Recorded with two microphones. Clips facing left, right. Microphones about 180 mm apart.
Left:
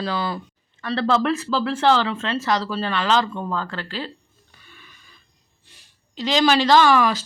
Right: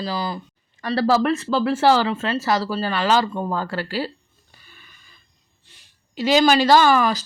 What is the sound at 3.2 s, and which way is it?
Speech, 40° right (ahead or behind).